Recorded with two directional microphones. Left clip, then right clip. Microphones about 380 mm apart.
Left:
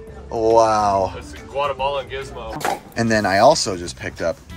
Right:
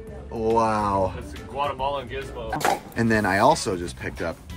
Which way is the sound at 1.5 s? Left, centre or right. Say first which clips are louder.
Left 5 dB; left.